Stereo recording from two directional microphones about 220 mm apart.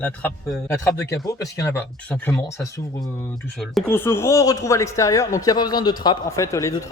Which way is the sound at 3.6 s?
Centre (ahead or behind).